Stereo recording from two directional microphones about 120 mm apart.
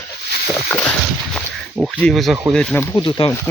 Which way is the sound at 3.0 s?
45° left (ahead or behind).